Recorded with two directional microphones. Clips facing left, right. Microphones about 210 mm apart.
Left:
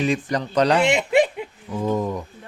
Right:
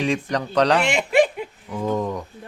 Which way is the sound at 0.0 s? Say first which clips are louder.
Left 1 dB; 5° left (ahead or behind).